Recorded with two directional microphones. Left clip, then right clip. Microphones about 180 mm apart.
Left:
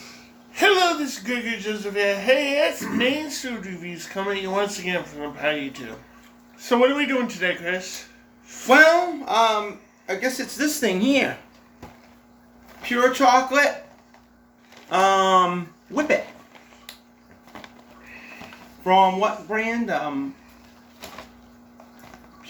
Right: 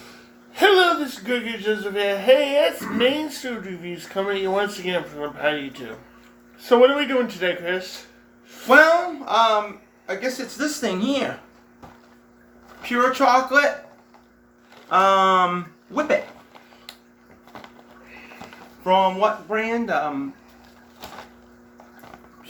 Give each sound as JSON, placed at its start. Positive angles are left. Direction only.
{"t": 0.5, "sound": "a man's voice", "side_deg": -15}
{"t": 8.6, "sound": "speech", "side_deg": 20}
{"t": 12.8, "sound": "speech", "side_deg": 15}
{"t": 14.8, "sound": "speech", "side_deg": 15}
{"t": 18.8, "sound": "speech", "side_deg": 10}